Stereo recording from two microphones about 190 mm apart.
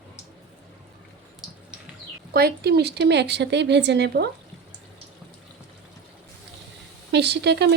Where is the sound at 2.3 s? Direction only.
55° right (ahead or behind).